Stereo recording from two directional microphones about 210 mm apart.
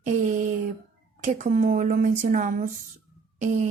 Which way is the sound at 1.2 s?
35° right (ahead or behind).